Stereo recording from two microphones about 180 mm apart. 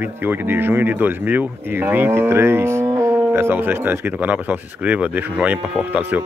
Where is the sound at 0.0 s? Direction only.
10° right (ahead or behind).